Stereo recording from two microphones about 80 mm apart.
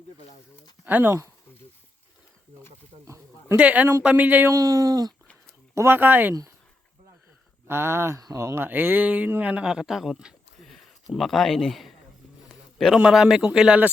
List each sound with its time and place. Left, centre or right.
0.9 s speech: right
3.6 s speech: centre
4.5 s speech: right
5.7 s speech: right
7.7 s speech: right
8.6 s speech: right; by 11.9 s centre
12.5 s a sound: centre
13.0 s speech: centre